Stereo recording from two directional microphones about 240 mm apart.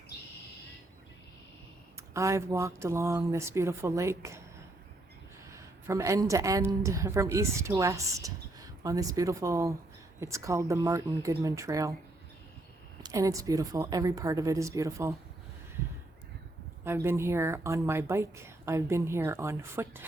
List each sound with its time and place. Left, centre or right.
2.1 s speech: centre
5.5 s speech: centre
13.0 s speech: centre
16.8 s speech: centre